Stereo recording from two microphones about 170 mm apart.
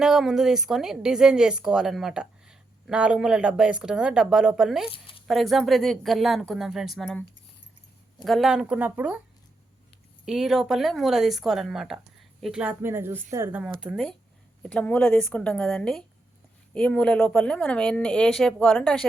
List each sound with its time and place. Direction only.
0.0 s a woman's voice: centre (ahead or behind)
4.9 s speech: 30° left (ahead or behind)
5.3 s a woman's voice: centre (ahead or behind)
10.2 s a woman's voice: centre (ahead or behind)
13.7 s a woman's voice: centre (ahead or behind)